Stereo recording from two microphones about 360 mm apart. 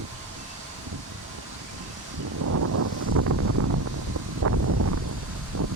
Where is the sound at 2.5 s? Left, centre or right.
Right.